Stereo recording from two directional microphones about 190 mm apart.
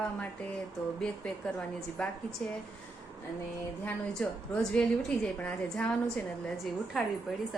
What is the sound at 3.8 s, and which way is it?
A woman's voice, 5° left (ahead or behind).